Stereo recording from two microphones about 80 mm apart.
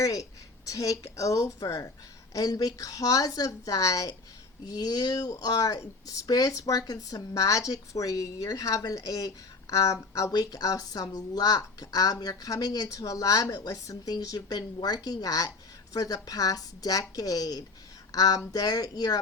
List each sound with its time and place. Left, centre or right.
0.0 s speech: left